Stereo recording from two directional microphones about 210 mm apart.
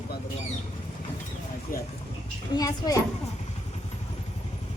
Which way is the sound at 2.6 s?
15° left (ahead or behind).